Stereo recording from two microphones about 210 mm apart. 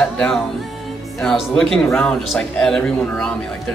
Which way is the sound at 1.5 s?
Centre (ahead or behind).